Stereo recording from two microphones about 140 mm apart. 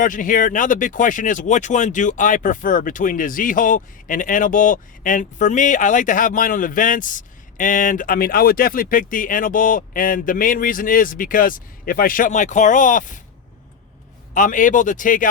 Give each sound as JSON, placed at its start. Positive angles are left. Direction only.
{"t": 0.0, "sound": "speech", "side_deg": 70}
{"t": 14.3, "sound": "speech", "side_deg": 70}